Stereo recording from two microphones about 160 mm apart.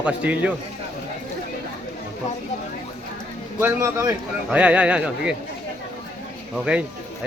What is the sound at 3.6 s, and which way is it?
Speech, 15° right (ahead or behind).